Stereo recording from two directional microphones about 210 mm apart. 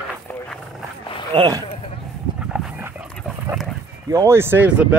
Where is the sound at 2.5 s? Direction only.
5° right (ahead or behind).